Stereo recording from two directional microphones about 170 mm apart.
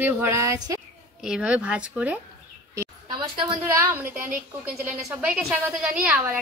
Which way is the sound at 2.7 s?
20° right (ahead or behind).